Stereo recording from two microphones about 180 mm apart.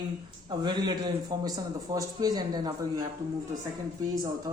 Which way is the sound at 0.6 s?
25° right (ahead or behind).